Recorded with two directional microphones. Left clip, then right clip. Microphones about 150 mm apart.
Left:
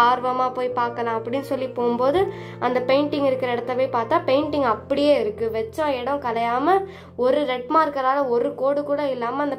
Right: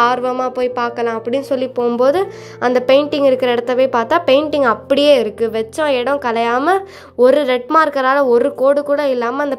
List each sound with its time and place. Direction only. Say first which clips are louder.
0.0 s speech: right 4 dB; 25° right (ahead or behind)